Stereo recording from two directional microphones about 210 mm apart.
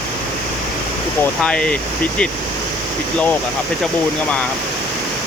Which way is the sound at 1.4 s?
5° left (ahead or behind).